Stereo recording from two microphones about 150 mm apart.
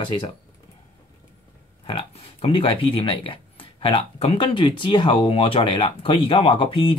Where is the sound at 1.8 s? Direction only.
40° left (ahead or behind).